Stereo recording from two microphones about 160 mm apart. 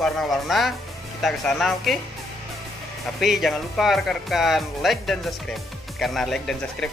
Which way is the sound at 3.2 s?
Centre (ahead or behind).